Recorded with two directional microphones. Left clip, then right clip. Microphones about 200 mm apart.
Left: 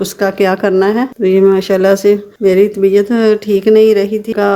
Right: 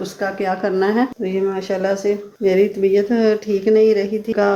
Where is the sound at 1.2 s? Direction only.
45° left (ahead or behind).